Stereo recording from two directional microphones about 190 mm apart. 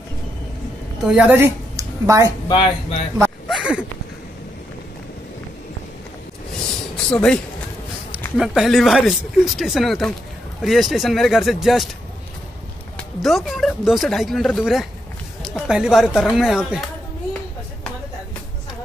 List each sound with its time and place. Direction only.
1.0 s a woman's voice: 5° right (ahead or behind)
2.4 s speech: 25° left (ahead or behind)
3.4 s a sound: centre (ahead or behind)
7.1 s speech: 5° left (ahead or behind)
8.4 s speech: centre (ahead or behind)
12.9 s speech: centre (ahead or behind)